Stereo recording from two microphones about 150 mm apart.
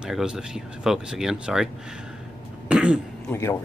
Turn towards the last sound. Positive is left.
turn(degrees=20)  # may be behind; listen again after turning